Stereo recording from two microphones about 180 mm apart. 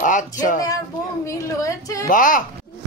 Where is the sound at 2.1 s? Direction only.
50° left (ahead or behind).